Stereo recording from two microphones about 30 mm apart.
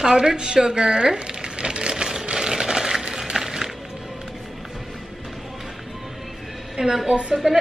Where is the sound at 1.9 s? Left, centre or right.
Right.